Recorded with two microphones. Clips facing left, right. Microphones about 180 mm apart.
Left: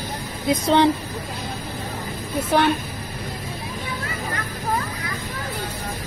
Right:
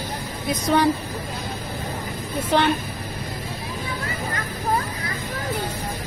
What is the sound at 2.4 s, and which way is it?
Vehicle, 10° left (ahead or behind).